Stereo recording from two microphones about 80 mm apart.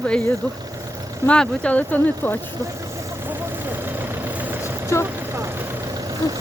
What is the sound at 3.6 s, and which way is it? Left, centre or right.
Vehicle, right.